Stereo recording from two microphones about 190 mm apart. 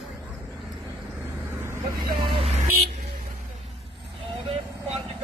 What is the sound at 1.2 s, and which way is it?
Vehicle, 10° right (ahead or behind).